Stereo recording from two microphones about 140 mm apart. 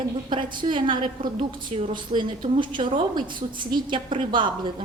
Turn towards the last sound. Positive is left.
turn(degrees=-35)  # may be behind; listen again after turning